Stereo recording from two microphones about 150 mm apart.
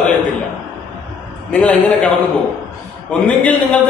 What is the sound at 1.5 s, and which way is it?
Speech, 10° left (ahead or behind).